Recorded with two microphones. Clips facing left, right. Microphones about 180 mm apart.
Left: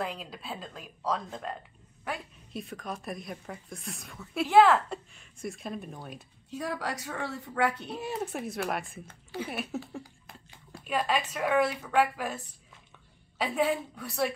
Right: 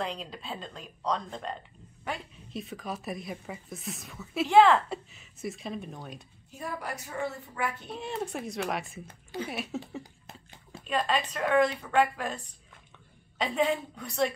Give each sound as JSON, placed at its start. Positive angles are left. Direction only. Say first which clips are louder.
{"t": 0.0, "sound": "speech", "louder": "right 1 dB", "side_deg": 5}
{"t": 6.5, "sound": "a woman's voice", "louder": "left 3 dB", "side_deg": 85}
{"t": 7.9, "sound": "speech", "louder": "even", "side_deg": 5}
{"t": 10.8, "sound": "a woman's voice", "louder": "even", "side_deg": 10}
{"t": 13.4, "sound": "speech", "louder": "even", "side_deg": 0}